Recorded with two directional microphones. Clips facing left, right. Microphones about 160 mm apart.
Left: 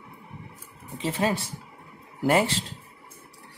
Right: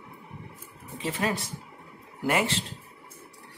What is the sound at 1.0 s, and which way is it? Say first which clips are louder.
Speech: left 3 dB; 30° left (ahead or behind).